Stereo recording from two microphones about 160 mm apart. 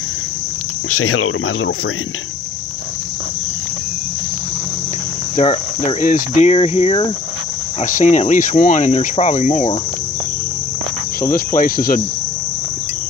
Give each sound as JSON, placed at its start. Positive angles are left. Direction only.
{"t": 5.3, "sound": "cricket", "side_deg": 45}
{"t": 7.8, "sound": "speech", "side_deg": 50}
{"t": 11.1, "sound": "cricket", "side_deg": 65}